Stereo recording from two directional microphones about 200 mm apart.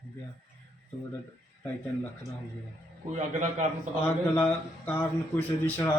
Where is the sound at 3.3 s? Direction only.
35° right (ahead or behind).